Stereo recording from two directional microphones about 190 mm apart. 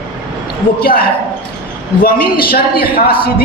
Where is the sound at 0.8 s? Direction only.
50° left (ahead or behind).